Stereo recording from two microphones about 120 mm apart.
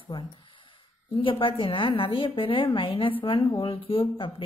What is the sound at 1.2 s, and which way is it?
Speech, 45° left (ahead or behind).